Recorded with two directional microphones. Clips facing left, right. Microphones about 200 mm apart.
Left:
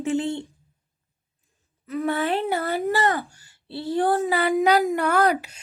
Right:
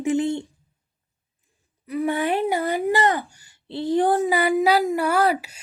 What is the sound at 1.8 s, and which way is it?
Speech, 15° right (ahead or behind).